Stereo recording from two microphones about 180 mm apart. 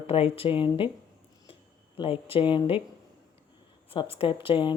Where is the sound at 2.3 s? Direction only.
25° left (ahead or behind).